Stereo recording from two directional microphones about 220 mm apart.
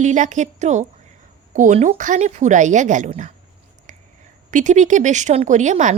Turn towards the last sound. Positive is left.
turn(degrees=-35)  # may be behind; listen again after turning